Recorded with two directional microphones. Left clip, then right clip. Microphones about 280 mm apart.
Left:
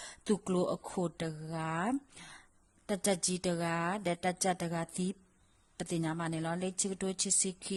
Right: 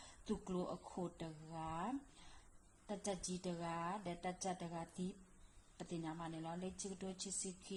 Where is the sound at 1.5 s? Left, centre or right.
Left.